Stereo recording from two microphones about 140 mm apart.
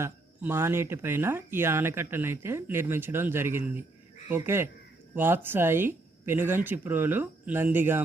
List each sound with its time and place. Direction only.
0.0 s speech: 20° right (ahead or behind)